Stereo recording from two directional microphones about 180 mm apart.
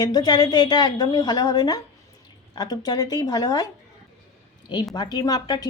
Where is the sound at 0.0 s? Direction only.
20° left (ahead or behind).